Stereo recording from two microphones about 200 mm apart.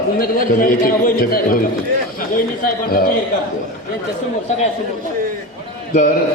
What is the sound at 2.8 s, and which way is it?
Speech, 45° left (ahead or behind).